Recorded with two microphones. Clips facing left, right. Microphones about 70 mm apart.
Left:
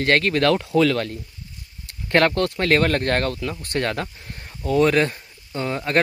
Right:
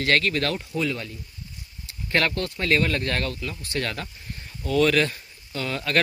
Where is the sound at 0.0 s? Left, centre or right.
Left.